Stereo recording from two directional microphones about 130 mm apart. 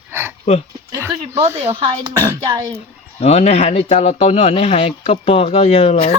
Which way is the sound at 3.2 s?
55° left (ahead or behind).